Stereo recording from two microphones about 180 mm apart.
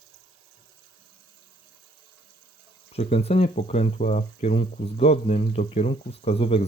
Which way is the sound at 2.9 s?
35° left (ahead or behind).